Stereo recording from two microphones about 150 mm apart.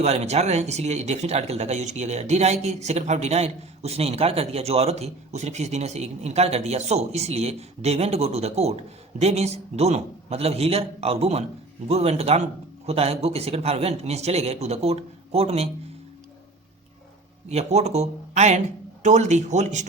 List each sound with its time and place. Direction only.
0.0 s speech: 45° right (ahead or behind)
17.5 s speech: 45° right (ahead or behind)